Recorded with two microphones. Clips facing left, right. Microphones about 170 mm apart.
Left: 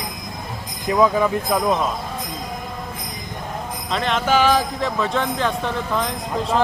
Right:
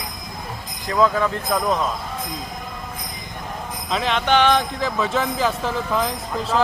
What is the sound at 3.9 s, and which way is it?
Speech, centre (ahead or behind).